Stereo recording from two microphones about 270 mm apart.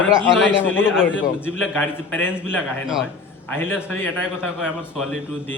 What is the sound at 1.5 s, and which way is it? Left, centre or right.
A man's voice, centre.